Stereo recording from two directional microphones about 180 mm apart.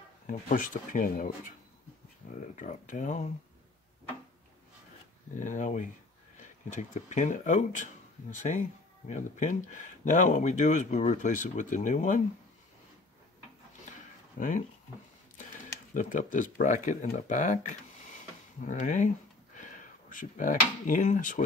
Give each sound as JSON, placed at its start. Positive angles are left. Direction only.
{"t": 0.3, "sound": "speech", "side_deg": 45}
{"t": 5.3, "sound": "speech", "side_deg": 45}
{"t": 14.4, "sound": "speech", "side_deg": 45}
{"t": 15.9, "sound": "speech", "side_deg": 45}